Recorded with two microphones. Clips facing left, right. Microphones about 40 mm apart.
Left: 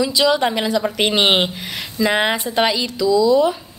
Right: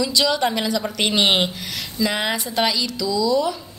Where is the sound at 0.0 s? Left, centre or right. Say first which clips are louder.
Left 3 dB; centre.